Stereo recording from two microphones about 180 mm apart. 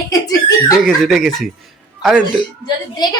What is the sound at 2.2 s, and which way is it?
Speech, 20° left (ahead or behind).